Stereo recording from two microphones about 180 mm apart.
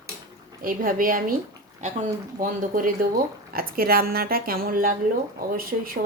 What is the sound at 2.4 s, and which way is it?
Speech, 50° right (ahead or behind).